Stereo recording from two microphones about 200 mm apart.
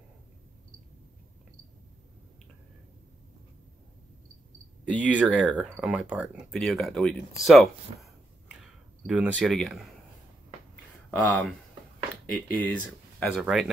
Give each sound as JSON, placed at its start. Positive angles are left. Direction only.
{"t": 4.9, "sound": "speech", "side_deg": -5}
{"t": 7.4, "sound": "a sound", "side_deg": 0}
{"t": 9.0, "sound": "speech", "side_deg": 0}
{"t": 11.1, "sound": "speech", "side_deg": 5}